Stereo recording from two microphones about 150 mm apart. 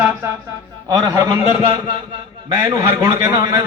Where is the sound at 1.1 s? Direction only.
20° right (ahead or behind).